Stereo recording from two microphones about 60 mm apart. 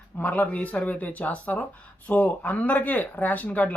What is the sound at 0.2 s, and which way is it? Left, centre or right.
Speech, left.